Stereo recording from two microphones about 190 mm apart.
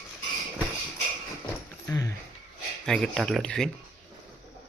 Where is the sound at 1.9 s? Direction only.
20° left (ahead or behind).